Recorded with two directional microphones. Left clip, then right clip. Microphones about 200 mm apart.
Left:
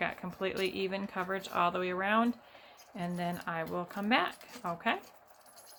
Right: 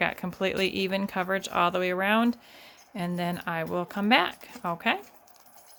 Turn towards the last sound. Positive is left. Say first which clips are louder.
# right 6 dB
turn(degrees=-55)  # may be behind; listen again after turning